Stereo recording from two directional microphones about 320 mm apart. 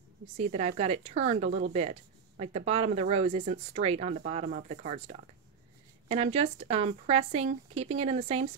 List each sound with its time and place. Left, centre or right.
0.4 s a woman's voice: centre